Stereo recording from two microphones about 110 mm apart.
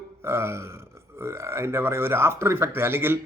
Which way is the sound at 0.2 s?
25° right (ahead or behind).